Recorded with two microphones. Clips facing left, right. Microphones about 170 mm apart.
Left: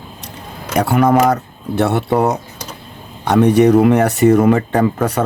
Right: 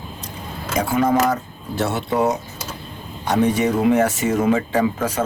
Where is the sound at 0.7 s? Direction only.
70° left (ahead or behind).